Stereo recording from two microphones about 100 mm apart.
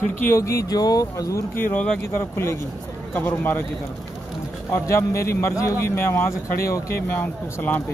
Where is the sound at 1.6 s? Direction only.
20° left (ahead or behind).